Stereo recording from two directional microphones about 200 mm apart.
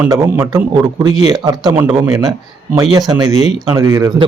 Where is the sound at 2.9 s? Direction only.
20° right (ahead or behind).